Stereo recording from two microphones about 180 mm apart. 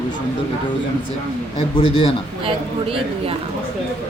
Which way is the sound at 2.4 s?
30° right (ahead or behind).